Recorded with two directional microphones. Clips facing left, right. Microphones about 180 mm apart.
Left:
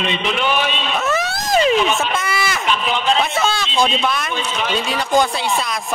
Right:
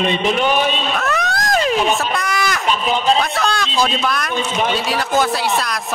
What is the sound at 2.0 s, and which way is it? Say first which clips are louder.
Speech: right 1 dB; centre (ahead or behind).